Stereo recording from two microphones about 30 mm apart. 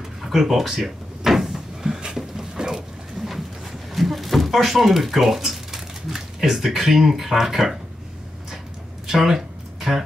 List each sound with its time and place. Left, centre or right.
0.2 s drawer open or close: centre
2.5 s mechanisms: right
3.2 s boat: centre
3.9 s speech: centre
9.0 s a sound: centre